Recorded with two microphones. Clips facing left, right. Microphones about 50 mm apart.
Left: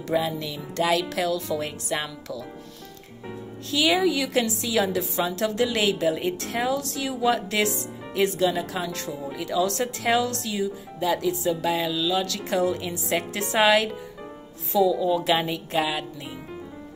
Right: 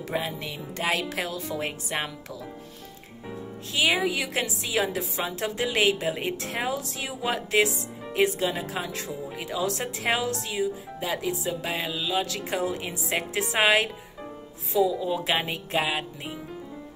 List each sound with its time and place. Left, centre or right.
0.1 s a woman's voice: right
3.8 s speech: centre
9.3 s a woman's voice: right
14.9 s a woman's voice: right
15.8 s music: right